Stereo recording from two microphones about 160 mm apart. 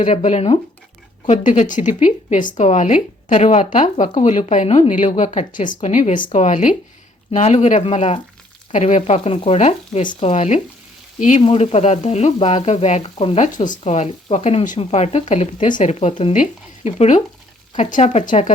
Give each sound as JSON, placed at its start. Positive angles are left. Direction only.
{"t": 0.0, "sound": "speech", "side_deg": 45}
{"t": 7.3, "sound": "speech", "side_deg": 45}
{"t": 11.4, "sound": "frying", "side_deg": 40}
{"t": 13.7, "sound": "speech", "side_deg": 45}